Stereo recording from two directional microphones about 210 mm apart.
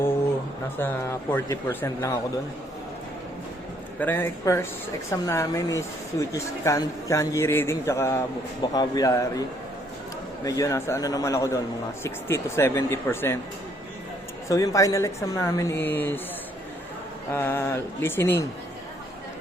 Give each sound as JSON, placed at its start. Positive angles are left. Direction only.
{"t": 0.8, "sound": "speech", "side_deg": 10}
{"t": 4.0, "sound": "speech", "side_deg": 10}
{"t": 10.4, "sound": "speech", "side_deg": 15}
{"t": 14.4, "sound": "speech", "side_deg": 15}
{"t": 17.3, "sound": "speech", "side_deg": 10}